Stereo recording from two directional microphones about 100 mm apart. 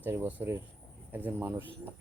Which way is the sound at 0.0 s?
15° right (ahead or behind).